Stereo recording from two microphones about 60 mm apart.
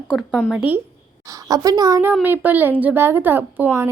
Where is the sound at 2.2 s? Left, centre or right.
Right.